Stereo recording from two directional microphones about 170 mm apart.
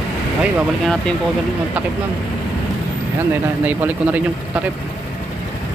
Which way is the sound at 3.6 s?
10° right (ahead or behind).